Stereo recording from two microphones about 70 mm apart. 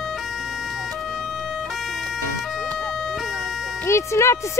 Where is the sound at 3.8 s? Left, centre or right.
Left.